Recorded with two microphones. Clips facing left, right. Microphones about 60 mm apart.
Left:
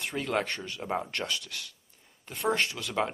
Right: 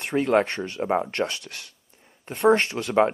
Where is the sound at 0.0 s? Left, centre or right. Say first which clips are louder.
Right 9 dB; right.